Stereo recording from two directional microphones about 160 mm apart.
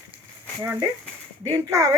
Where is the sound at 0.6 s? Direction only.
20° right (ahead or behind).